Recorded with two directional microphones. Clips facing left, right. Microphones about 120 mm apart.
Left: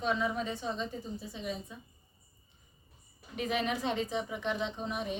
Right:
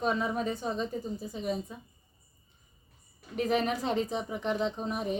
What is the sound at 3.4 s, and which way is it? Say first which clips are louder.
Speech: right 4 dB; 40° right (ahead or behind).